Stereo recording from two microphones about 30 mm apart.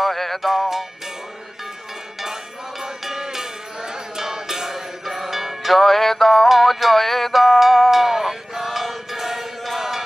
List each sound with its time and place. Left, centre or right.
0.0 s music: centre
0.4 s music: centre
2.8 s music: centre
6.5 s music: centre
7.3 s music: centre
9.7 s chant: centre